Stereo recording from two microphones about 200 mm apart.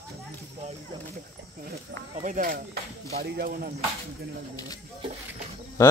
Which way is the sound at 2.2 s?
40° right (ahead or behind).